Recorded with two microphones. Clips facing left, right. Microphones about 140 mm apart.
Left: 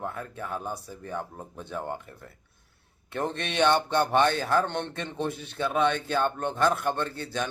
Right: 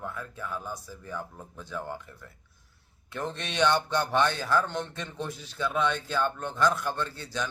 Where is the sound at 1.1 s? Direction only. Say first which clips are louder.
Left 3 dB; 30° left (ahead or behind).